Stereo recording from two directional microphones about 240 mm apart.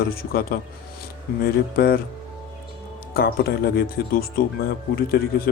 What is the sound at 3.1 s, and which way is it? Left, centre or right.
Speech, left.